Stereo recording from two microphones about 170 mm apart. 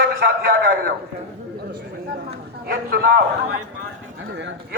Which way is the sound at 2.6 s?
60° right (ahead or behind).